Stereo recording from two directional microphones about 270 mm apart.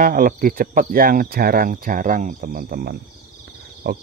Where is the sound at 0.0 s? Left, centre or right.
Right.